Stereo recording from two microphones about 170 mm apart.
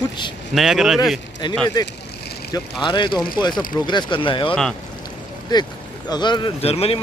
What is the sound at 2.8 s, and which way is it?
Speech, 30° left (ahead or behind).